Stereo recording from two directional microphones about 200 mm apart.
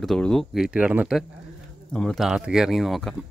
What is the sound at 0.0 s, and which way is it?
Speech, centre (ahead or behind).